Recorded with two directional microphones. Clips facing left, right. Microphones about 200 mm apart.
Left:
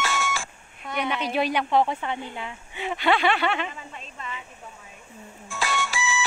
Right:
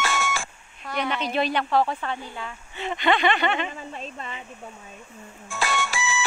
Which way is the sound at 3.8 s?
35° right (ahead or behind).